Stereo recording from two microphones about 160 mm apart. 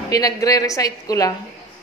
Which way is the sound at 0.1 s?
20° left (ahead or behind).